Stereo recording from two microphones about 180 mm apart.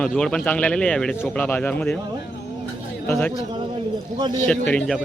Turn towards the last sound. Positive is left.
turn(degrees=5)  # may be behind; listen again after turning